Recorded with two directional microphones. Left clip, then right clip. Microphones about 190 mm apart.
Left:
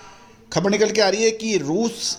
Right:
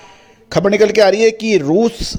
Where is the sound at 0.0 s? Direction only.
50° right (ahead or behind).